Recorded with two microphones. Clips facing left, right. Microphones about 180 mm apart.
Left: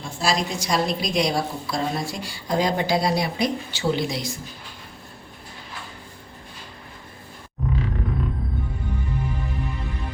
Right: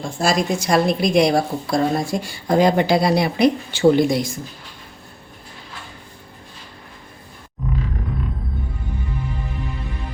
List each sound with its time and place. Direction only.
0.2 s a woman's voice: 50° right (ahead or behind)